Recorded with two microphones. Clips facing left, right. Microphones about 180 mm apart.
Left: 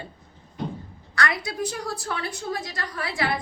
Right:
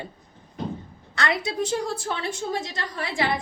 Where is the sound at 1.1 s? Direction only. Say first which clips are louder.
Right 1 dB; 25° right (ahead or behind).